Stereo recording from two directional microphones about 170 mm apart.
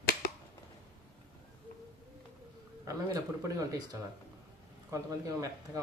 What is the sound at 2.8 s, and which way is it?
Speech, 20° right (ahead or behind).